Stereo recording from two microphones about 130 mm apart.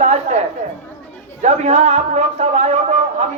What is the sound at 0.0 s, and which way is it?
Chatter, 60° right (ahead or behind).